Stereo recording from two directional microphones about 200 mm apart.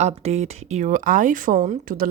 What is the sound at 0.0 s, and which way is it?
Speech, 30° right (ahead or behind).